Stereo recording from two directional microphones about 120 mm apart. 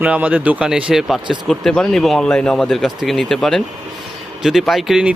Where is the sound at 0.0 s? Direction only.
10° right (ahead or behind).